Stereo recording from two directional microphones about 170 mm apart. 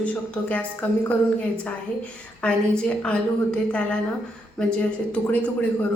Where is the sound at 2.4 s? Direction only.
5° left (ahead or behind).